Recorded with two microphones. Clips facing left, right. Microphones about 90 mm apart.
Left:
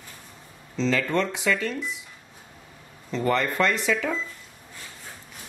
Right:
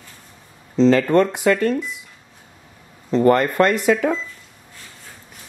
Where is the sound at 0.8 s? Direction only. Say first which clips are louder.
Right 10 dB; 45° right (ahead or behind).